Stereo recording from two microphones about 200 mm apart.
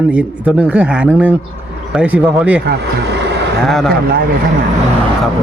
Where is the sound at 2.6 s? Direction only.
55° right (ahead or behind).